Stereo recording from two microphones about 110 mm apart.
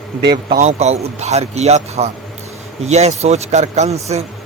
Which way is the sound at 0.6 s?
80° right.